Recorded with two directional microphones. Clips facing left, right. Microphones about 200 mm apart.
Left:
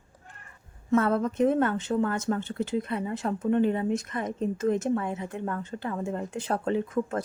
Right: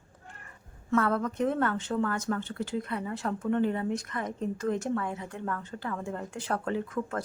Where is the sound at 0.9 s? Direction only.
25° left (ahead or behind).